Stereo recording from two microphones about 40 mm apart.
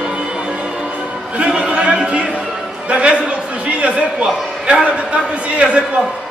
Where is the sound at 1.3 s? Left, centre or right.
Right.